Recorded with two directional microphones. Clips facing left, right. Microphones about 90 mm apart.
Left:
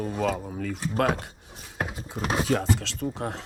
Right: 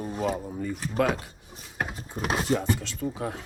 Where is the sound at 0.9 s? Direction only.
55° left (ahead or behind).